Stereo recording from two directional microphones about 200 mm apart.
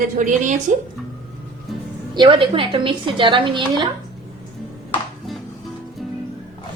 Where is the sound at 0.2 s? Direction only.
40° right (ahead or behind).